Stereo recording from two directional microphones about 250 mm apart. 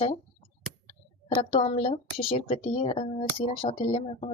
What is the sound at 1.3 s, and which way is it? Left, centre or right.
A woman's voice, left.